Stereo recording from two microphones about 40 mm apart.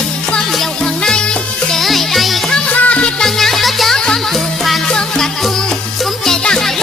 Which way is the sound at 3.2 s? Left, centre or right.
Centre.